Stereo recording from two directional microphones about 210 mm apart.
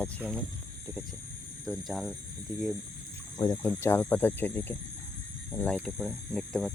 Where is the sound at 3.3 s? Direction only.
20° left (ahead or behind).